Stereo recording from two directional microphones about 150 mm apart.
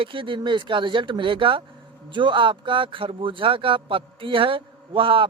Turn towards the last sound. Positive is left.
turn(degrees=-35)  # may be behind; listen again after turning